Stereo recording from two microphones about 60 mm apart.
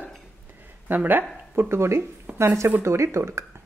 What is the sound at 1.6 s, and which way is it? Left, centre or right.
A man's voice, right.